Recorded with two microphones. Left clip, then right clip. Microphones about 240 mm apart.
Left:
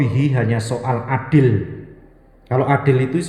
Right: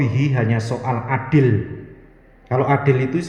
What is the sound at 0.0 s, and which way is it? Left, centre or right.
Speech, left.